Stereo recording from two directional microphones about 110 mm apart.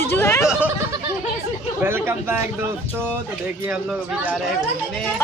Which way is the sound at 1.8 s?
20° right (ahead or behind).